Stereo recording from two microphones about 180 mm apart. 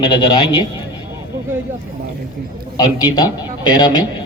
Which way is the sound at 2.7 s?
20° left (ahead or behind).